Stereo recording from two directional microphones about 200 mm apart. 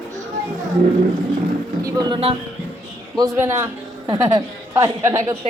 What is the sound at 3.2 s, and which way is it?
A man's voice, 15° right (ahead or behind).